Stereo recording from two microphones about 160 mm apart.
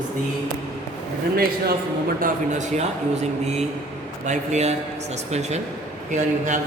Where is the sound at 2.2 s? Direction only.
50° right (ahead or behind).